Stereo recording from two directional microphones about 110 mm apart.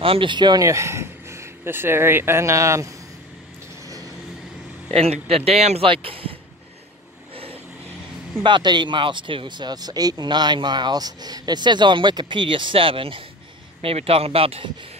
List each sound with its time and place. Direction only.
0.0 s speech: 55° right (ahead or behind)
0.7 s speech: 25° right (ahead or behind)
4.9 s speech: 70° right (ahead or behind)
5.9 s speech: 55° right (ahead or behind)
8.4 s speech: 45° right (ahead or behind)
13.7 s speech: 70° right (ahead or behind)